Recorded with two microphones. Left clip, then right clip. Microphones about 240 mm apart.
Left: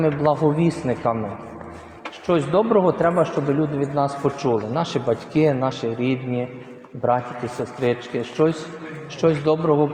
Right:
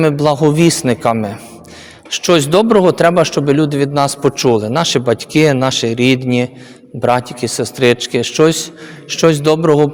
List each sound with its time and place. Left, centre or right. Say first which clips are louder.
0.0 s a man's voice: right 7 dB; right
2.1 s a man's voice: right 8 dB; right
7.6 s a man's voice: right 10 dB; right